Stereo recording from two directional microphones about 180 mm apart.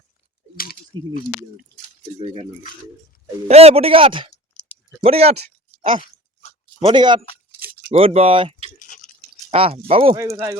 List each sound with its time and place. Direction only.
0.5 s a sound: 55° left (ahead or behind)
2.1 s speech: 30° right (ahead or behind)
6.7 s speech: 25° right (ahead or behind)
8.8 s drip: 45° left (ahead or behind)
9.5 s speech: 35° right (ahead or behind)
10.2 s speech: 15° right (ahead or behind)